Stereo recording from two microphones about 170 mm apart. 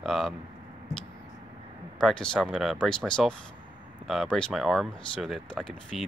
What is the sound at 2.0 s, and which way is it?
Speech, 5° left (ahead or behind).